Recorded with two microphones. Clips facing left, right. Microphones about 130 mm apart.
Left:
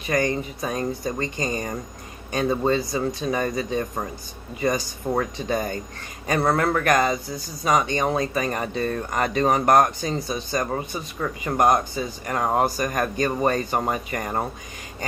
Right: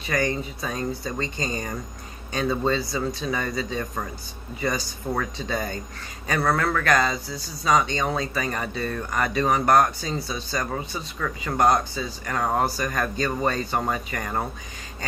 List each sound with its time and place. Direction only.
0.0 s speech: 20° left (ahead or behind)
2.3 s speech: 20° left (ahead or behind)